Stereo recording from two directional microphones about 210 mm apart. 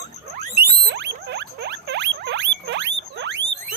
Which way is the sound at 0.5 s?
45° right (ahead or behind).